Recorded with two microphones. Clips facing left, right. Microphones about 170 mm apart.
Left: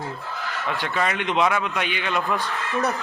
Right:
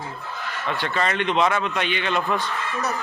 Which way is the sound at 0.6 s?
10° left (ahead or behind).